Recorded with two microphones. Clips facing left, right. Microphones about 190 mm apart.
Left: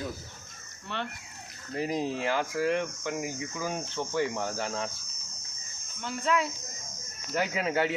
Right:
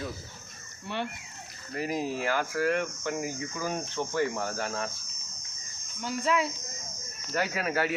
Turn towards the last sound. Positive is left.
turn(degrees=20)  # may be behind; listen again after turning